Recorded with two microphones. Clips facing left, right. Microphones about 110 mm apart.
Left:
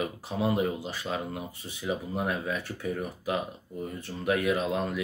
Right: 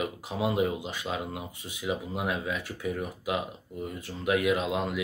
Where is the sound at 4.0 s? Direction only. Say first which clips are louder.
Right 1 dB; 15° right (ahead or behind).